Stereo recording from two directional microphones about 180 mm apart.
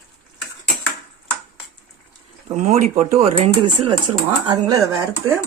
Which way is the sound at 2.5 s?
40° right (ahead or behind).